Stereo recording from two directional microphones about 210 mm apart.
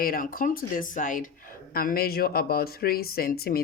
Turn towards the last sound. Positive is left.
turn(degrees=45)  # may be behind; listen again after turning